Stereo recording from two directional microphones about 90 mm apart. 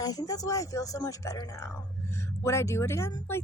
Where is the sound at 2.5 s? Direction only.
30° left (ahead or behind).